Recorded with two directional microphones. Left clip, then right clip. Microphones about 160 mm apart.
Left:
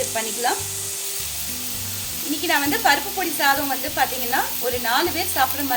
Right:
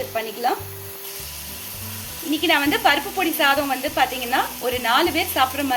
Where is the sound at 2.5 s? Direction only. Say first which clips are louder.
Right 1 dB; 5° right (ahead or behind).